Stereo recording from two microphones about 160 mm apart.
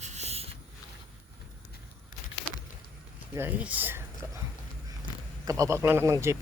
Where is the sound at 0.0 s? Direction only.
45° right (ahead or behind).